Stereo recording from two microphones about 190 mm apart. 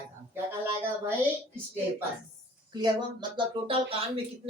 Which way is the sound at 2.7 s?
25° right (ahead or behind).